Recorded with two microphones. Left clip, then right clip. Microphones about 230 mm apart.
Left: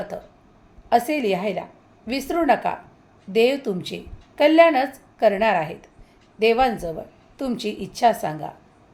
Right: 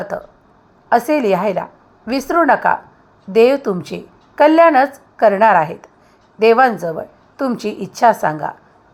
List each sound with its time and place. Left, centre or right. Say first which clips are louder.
0.1 s a woman's voice: right 9 dB; centre